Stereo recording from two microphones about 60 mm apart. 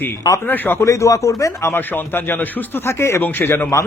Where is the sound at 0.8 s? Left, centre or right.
Left.